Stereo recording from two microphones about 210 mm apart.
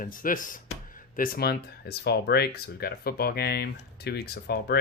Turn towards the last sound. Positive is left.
turn(degrees=50)  # may be behind; listen again after turning